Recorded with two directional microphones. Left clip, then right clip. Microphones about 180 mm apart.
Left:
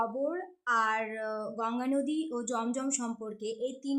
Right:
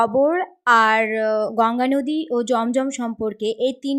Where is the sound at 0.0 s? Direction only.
40° right (ahead or behind).